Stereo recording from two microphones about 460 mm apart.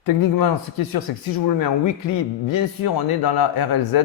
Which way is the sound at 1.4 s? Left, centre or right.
Left.